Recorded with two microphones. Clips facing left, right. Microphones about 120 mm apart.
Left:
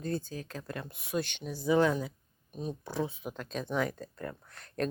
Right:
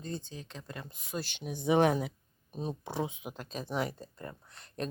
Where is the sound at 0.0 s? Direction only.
5° left (ahead or behind).